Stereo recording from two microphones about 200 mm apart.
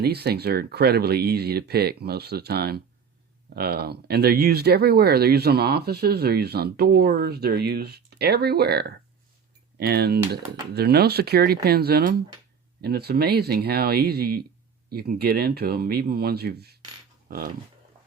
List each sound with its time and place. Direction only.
0.0 s speech: 55° right (ahead or behind)